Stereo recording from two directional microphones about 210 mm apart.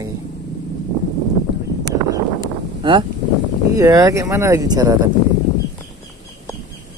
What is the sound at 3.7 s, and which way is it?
Speech, 15° right (ahead or behind).